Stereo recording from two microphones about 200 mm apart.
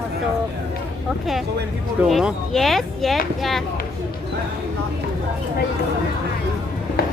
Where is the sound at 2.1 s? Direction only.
Centre (ahead or behind).